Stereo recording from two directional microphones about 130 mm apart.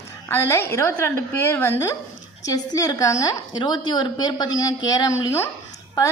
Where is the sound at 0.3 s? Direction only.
20° left (ahead or behind).